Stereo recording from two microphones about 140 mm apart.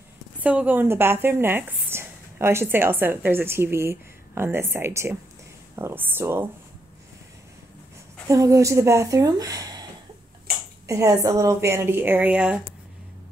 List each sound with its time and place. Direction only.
0.4 s a woman's voice: 10° right (ahead or behind)
8.3 s speech: 20° right (ahead or behind)
10.9 s a woman's voice: 25° right (ahead or behind)